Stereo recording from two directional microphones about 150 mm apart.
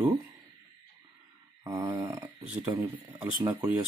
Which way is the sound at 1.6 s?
20° right (ahead or behind).